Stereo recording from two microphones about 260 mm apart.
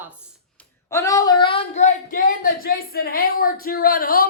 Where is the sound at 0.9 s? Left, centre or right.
Centre.